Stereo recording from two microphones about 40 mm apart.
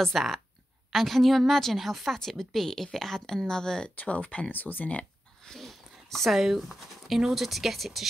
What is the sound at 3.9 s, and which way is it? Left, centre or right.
Speech, left.